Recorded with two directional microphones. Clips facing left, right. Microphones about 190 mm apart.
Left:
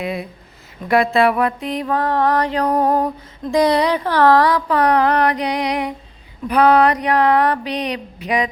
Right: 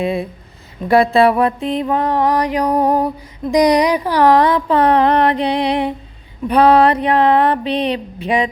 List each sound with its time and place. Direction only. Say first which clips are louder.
0.0 s mantra: right 5 dB; 30° right (ahead or behind)